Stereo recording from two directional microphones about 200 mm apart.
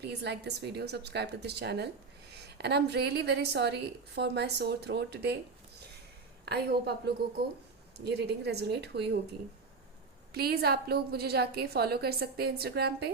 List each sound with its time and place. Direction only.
0.0 s a woman's voice: 55° right (ahead or behind)
6.4 s a woman's voice: 55° right (ahead or behind)
10.3 s a woman's voice: 50° right (ahead or behind)